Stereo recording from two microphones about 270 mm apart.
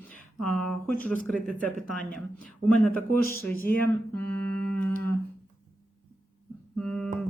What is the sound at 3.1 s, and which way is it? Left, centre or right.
Speech, left.